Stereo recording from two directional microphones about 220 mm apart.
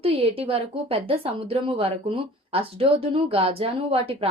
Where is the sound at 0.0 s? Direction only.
25° right (ahead or behind).